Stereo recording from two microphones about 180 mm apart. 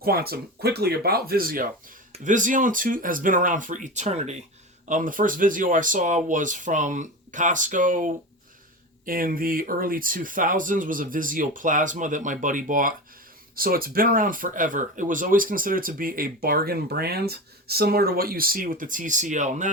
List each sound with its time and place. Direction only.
0.0 s speech: 60° right (ahead or behind); by 19.7 s 40° right (ahead or behind)